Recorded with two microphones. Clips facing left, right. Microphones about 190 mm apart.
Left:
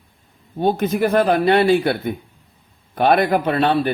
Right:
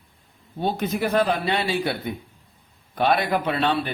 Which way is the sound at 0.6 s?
50° left (ahead or behind).